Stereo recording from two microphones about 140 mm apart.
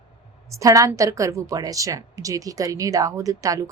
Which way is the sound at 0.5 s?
25° right (ahead or behind).